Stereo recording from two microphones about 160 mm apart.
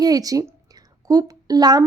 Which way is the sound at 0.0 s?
25° right (ahead or behind).